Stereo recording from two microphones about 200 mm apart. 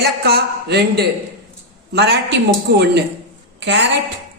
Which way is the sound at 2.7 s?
60° right (ahead or behind).